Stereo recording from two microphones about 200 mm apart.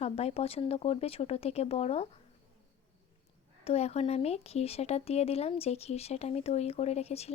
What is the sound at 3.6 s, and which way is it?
Speech, 30° left (ahead or behind).